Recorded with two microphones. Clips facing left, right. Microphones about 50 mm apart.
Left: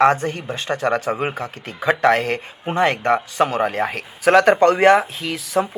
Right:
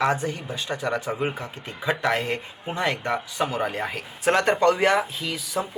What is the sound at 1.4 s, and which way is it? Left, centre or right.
Speech, left.